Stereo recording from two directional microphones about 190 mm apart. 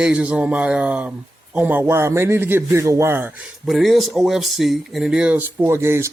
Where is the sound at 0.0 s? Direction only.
5° right (ahead or behind).